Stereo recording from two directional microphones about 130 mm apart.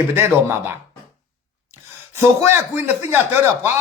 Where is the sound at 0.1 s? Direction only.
20° right (ahead or behind).